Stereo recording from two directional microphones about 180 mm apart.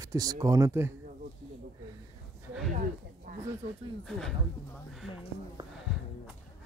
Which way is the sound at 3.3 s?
50° right (ahead or behind).